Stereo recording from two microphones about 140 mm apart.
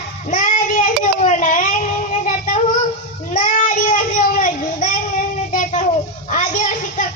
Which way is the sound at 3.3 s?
65° left (ahead or behind).